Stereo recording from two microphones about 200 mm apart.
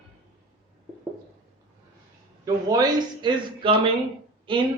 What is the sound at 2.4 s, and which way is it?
Speech, 20° right (ahead or behind).